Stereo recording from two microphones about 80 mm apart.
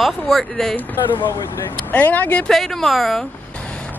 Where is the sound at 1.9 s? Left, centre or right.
Left.